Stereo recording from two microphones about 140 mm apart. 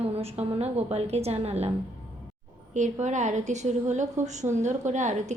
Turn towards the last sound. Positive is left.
turn(degrees=-60)  # may be behind; listen again after turning